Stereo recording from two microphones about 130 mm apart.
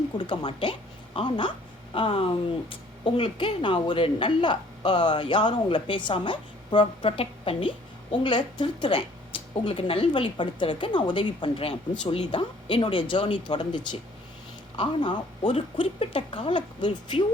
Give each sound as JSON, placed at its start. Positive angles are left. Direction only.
{"t": 0.2, "sound": "a woman's voice", "side_deg": 40}
{"t": 8.2, "sound": "speech", "side_deg": 35}
{"t": 9.3, "sound": "a sound", "side_deg": 45}
{"t": 9.6, "sound": "speech", "side_deg": 45}